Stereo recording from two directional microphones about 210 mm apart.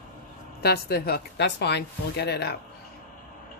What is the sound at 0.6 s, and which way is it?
Speech, 50° left (ahead or behind).